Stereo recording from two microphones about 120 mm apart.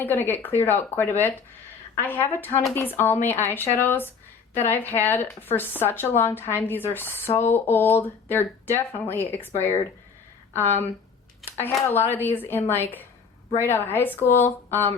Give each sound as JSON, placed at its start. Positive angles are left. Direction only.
{"t": 0.0, "sound": "speech", "side_deg": 15}
{"t": 11.4, "sound": "a sound", "side_deg": 15}
{"t": 11.9, "sound": "speech", "side_deg": 20}